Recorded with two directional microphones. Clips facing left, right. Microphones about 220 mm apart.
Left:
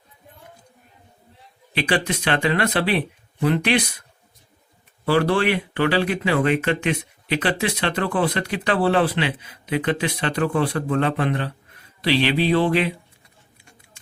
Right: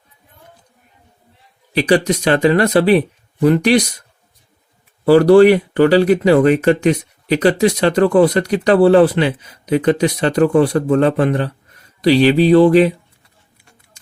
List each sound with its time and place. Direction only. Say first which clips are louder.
1.7 s speech: right 8 dB; 40° right (ahead or behind)
5.0 s speech: right 12 dB; 40° right (ahead or behind)